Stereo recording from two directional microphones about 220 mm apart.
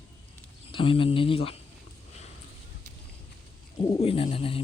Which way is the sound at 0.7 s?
25° left (ahead or behind).